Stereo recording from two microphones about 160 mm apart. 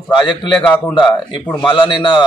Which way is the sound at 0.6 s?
10° left (ahead or behind).